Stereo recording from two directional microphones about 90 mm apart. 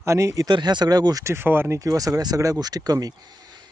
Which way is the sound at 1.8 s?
40° right (ahead or behind).